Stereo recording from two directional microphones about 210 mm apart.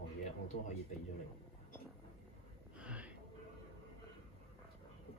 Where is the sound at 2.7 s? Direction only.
5° right (ahead or behind).